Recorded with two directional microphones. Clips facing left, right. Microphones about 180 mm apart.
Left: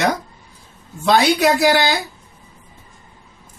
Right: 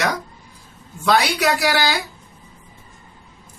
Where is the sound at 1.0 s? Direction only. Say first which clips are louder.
Left 4 dB; 25° left (ahead or behind).